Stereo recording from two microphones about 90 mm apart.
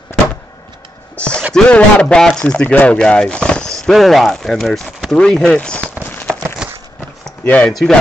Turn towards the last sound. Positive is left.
turn(degrees=0)  # may be behind; listen again after turning